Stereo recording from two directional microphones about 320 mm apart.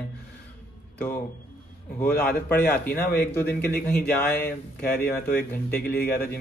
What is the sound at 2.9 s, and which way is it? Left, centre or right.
Speech, centre.